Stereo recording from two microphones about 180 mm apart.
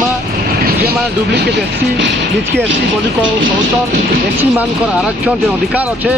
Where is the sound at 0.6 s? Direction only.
65° right (ahead or behind); by 2.5 s 80° right.